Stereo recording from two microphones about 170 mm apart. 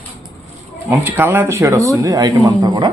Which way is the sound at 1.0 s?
10° right (ahead or behind).